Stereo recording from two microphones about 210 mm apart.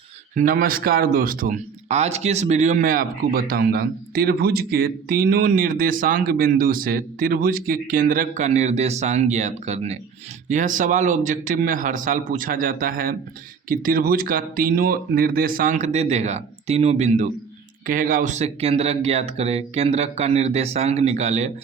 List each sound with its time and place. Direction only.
0.3 s speech: 40° right (ahead or behind)